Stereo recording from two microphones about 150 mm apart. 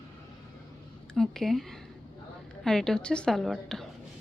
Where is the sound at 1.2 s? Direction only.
Centre (ahead or behind).